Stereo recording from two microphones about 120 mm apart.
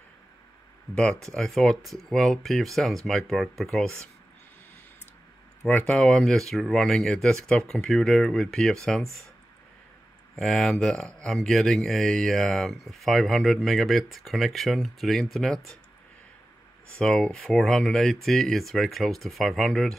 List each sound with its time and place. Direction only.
1.2 s speech: 5° left (ahead or behind)
5.6 s speech: 10° left (ahead or behind)
10.4 s speech: centre (ahead or behind)
17.0 s speech: 10° left (ahead or behind)